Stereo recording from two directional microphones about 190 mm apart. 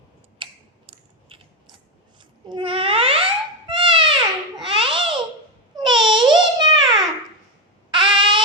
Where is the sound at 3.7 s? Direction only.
25° right (ahead or behind).